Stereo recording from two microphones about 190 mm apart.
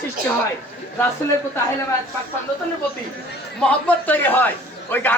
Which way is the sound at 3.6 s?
5° left (ahead or behind).